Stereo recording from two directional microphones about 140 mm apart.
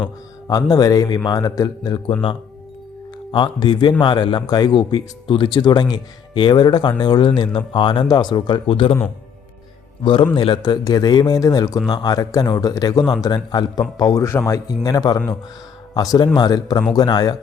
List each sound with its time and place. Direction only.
0.0 s a man's voice: 25° left (ahead or behind)
3.3 s speech: 35° left (ahead or behind)
10.0 s a man's voice: 35° left (ahead or behind)